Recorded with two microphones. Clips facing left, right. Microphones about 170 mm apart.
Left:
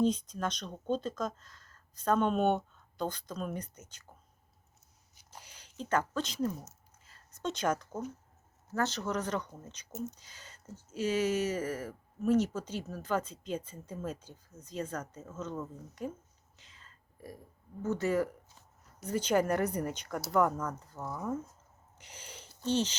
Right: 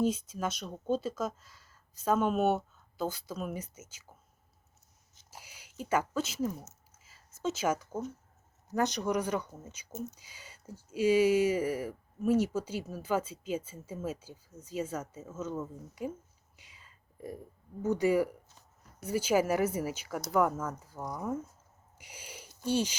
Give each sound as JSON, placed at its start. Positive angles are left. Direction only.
{"t": 0.0, "sound": "speech", "side_deg": -5}
{"t": 5.3, "sound": "a sound", "side_deg": -10}
{"t": 7.0, "sound": "speech", "side_deg": -5}
{"t": 16.6, "sound": "whispering", "side_deg": -10}
{"t": 17.8, "sound": "speech", "side_deg": -10}
{"t": 21.9, "sound": "a sound", "side_deg": -10}